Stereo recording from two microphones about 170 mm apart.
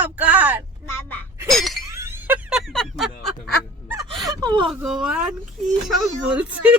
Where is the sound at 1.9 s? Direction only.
15° right (ahead or behind); by 3.5 s centre (ahead or behind).